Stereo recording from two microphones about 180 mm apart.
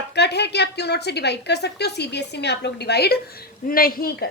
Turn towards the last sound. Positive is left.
turn(degrees=55)  # may be behind; listen again after turning